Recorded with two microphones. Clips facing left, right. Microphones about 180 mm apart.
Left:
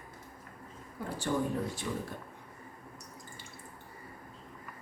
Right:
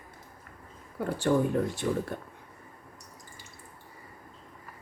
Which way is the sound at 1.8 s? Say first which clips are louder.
Right 7 dB; 50° right (ahead or behind).